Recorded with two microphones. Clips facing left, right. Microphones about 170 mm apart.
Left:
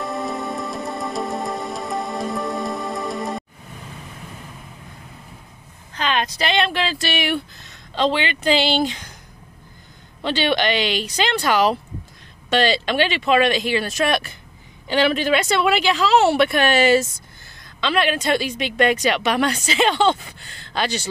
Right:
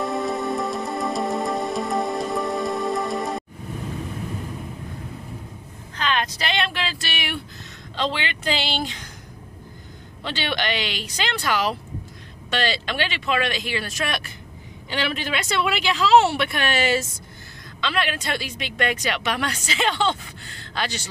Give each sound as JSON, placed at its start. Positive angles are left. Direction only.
{"t": 0.0, "sound": "music", "side_deg": 0}
{"t": 5.9, "sound": "speech", "side_deg": 20}
{"t": 7.9, "sound": "a woman's voice", "side_deg": 20}
{"t": 10.2, "sound": "a woman's voice", "side_deg": 20}
{"t": 17.7, "sound": "a woman's voice", "side_deg": 20}